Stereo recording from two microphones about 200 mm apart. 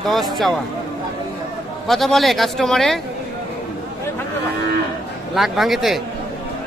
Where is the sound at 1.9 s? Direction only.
Centre (ahead or behind).